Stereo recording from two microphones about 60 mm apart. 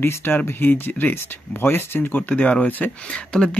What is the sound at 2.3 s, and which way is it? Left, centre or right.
Speech, left.